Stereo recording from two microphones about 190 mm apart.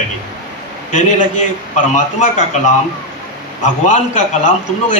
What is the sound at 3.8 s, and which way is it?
Speech, 40° left (ahead or behind).